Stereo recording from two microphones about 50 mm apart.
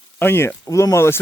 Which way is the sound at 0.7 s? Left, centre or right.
Left.